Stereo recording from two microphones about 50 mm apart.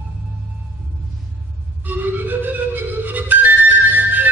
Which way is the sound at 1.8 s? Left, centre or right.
Right.